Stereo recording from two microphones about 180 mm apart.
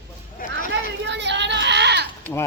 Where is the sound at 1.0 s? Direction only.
75° right (ahead or behind).